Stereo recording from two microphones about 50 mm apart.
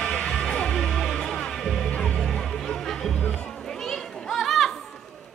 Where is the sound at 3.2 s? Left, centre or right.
Left.